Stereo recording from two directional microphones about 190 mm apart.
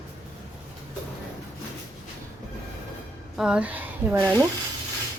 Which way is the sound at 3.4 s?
5° right (ahead or behind).